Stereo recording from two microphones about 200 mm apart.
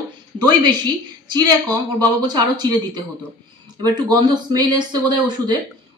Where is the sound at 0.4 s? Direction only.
20° right (ahead or behind).